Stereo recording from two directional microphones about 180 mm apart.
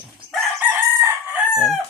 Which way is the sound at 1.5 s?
5° right (ahead or behind).